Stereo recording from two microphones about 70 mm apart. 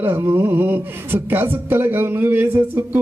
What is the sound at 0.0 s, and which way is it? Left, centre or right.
Speech, right.